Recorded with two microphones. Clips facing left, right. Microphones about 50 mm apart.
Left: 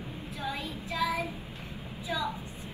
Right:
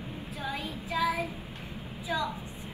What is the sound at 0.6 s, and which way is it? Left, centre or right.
Child singing, centre.